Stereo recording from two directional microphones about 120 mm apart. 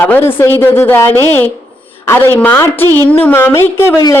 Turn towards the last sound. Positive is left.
turn(degrees=20)  # may be behind; listen again after turning